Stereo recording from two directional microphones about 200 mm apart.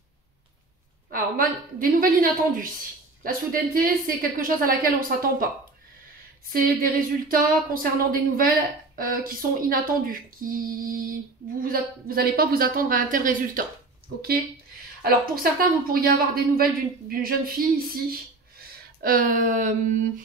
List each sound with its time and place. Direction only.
1.1 s speech: 45° right (ahead or behind)
6.5 s a woman's voice: 45° right (ahead or behind)
18.9 s speech: 45° right (ahead or behind)